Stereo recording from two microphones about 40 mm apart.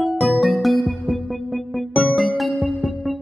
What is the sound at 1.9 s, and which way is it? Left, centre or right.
Music, left.